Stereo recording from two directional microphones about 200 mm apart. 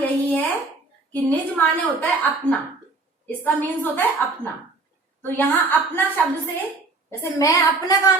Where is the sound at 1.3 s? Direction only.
10° left (ahead or behind).